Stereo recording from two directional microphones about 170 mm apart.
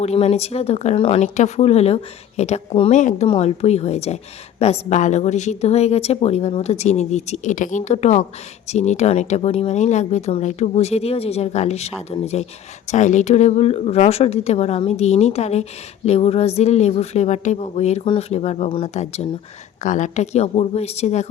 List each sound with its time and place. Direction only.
0.0 s a woman's voice: 40° left (ahead or behind)
2.9 s speech: 45° left (ahead or behind)
3.2 s a woman's voice: 35° left (ahead or behind)